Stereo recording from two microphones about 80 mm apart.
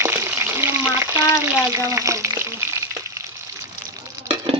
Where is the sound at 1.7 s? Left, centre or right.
Right.